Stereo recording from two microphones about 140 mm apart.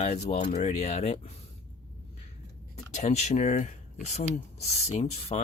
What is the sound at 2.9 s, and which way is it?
Speech, 55° left (ahead or behind).